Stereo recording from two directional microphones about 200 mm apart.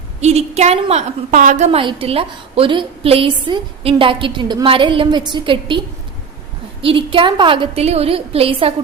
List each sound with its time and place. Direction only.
0.2 s a woman's voice: 35° right (ahead or behind)
6.8 s a woman's voice: 25° right (ahead or behind)